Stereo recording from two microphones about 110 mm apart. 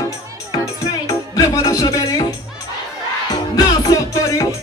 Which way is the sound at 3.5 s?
35° left (ahead or behind).